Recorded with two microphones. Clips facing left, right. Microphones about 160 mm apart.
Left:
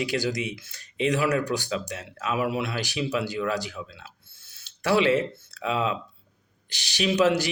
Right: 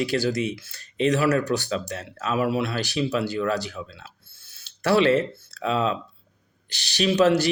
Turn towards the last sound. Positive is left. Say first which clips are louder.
# right 3 dB
turn(degrees=15)  # may be behind; listen again after turning